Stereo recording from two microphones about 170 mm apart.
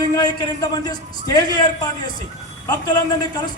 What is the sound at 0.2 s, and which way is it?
A man's voice, 25° left (ahead or behind).